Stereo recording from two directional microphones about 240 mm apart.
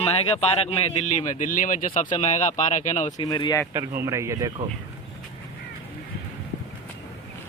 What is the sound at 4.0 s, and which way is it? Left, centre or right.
Speech, centre.